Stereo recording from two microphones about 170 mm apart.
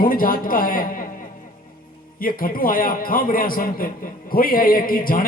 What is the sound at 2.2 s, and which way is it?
Speech, 55° left (ahead or behind).